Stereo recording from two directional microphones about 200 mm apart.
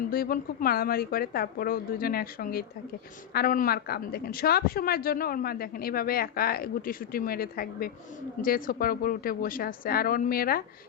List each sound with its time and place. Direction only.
0.1 s a woman's voice: 45° left (ahead or behind)